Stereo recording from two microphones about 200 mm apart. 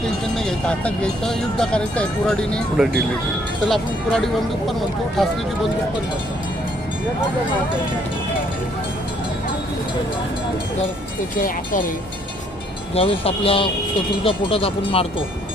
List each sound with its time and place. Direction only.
0.3 s speech: 5° left (ahead or behind)
11.3 s speech: 45° left (ahead or behind)
12.9 s speech: 30° left (ahead or behind)